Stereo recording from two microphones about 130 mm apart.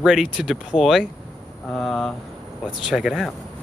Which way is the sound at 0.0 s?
5° right (ahead or behind).